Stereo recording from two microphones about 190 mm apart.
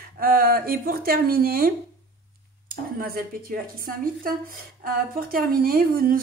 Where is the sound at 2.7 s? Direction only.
50° right (ahead or behind).